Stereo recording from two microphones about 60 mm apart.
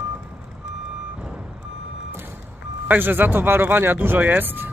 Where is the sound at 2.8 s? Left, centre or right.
Right.